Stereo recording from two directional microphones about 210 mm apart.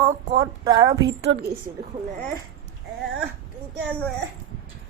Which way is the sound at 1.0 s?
55° right (ahead or behind).